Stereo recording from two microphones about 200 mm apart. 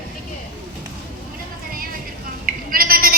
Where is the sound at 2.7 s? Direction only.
45° right (ahead or behind).